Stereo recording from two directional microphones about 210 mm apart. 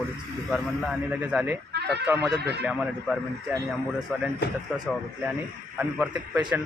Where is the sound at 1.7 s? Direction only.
55° right (ahead or behind).